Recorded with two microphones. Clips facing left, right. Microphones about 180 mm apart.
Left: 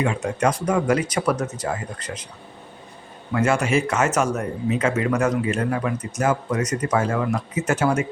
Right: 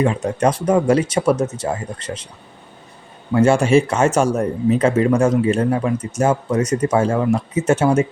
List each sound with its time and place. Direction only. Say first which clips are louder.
0.0 s speech: right 4 dB; 30° right (ahead or behind)
3.3 s speech: right 7 dB; 30° right (ahead or behind)